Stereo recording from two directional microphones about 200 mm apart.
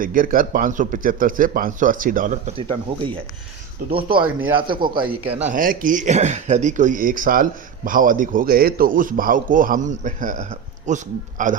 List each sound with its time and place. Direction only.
0.0 s a man's voice: 45° right (ahead or behind)
2.6 s speech: 25° right (ahead or behind)
5.3 s a man's voice: 35° right (ahead or behind)